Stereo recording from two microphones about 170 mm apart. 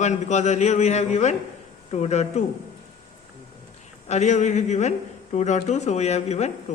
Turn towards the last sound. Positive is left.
turn(degrees=40)  # may be behind; listen again after turning